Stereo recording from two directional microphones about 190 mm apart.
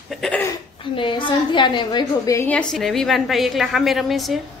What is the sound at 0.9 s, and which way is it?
A woman's voice, 25° left (ahead or behind).